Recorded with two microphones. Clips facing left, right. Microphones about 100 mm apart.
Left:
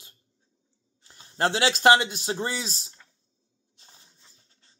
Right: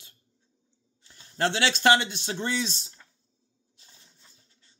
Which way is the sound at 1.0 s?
40° left (ahead or behind).